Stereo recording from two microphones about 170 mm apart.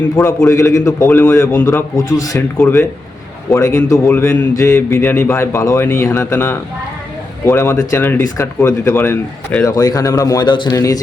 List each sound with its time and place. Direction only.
0.4 s a man's voice: 20° left (ahead or behind)
9.6 s a man's voice: 20° left (ahead or behind)